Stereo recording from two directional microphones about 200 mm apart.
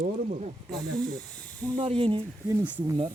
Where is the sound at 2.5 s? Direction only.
15° right (ahead or behind).